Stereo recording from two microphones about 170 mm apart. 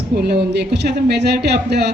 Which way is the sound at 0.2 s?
70° right (ahead or behind).